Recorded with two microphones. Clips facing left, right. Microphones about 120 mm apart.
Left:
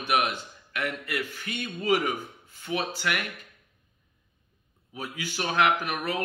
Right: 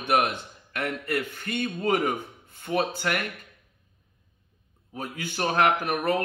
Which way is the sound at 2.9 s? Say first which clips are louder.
Right 2 dB; 40° right (ahead or behind).